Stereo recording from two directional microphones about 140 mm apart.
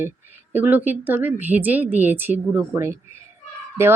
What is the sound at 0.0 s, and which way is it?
Speech, 15° right (ahead or behind).